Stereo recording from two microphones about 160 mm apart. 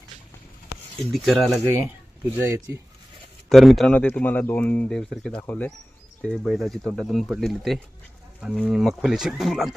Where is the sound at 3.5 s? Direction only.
Centre (ahead or behind).